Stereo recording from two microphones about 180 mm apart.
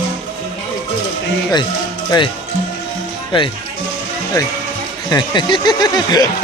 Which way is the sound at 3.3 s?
30° left (ahead or behind).